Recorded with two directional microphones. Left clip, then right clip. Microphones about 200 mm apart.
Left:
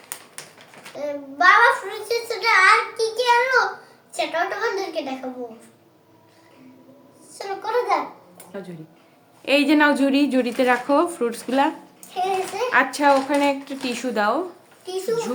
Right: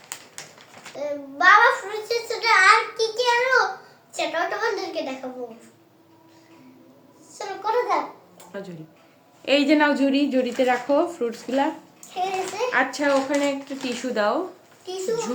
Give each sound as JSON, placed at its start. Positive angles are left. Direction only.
{"t": 0.9, "sound": "a child's voice", "side_deg": 10}
{"t": 7.3, "sound": "a child's voice", "side_deg": 10}
{"t": 8.5, "sound": "a woman's voice", "side_deg": -5}
{"t": 12.1, "sound": "a child's voice", "side_deg": 10}